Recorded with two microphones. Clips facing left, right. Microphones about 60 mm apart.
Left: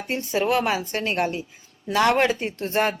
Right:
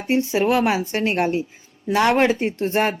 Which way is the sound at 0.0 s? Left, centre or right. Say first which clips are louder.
Right 5 dB; centre.